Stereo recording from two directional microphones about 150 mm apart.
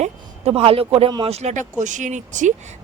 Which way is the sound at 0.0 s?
40° right (ahead or behind).